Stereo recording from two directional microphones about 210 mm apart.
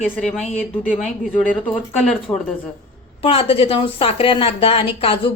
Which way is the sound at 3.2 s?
25° left (ahead or behind).